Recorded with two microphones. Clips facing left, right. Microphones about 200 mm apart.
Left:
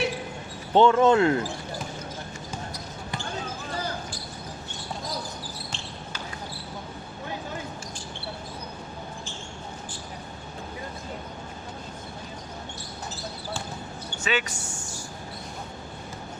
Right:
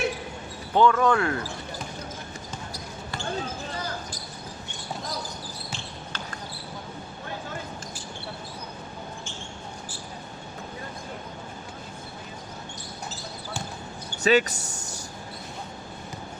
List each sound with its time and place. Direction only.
0.7 s speech: 25° left (ahead or behind)
5.7 s basketball bounce: 5° right (ahead or behind)
14.2 s speech: 40° right (ahead or behind)